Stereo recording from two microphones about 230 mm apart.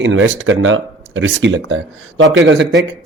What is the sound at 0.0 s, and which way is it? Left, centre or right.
Speech, right.